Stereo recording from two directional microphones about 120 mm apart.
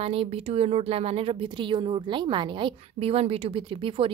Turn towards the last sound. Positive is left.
turn(degrees=-50)  # may be behind; listen again after turning